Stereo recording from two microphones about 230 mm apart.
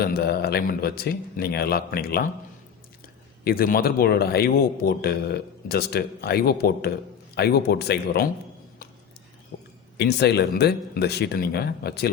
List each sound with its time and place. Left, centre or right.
0.0 s a man's voice: left
3.4 s a man's voice: left
9.5 s a sound: left
10.0 s a man's voice: left